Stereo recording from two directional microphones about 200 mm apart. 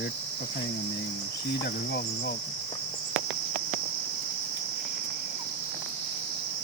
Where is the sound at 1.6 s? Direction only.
50° left (ahead or behind).